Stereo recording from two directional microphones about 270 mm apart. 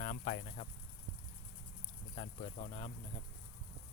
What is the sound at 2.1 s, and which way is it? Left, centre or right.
Speech, left.